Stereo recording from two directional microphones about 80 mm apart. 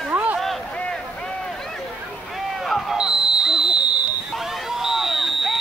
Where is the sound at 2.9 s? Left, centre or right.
Centre.